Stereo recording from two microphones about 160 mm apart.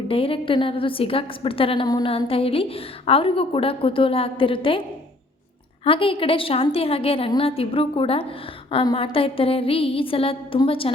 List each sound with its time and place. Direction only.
0.1 s a woman's voice: 35° left (ahead or behind)
5.8 s a woman's voice: 35° left (ahead or behind)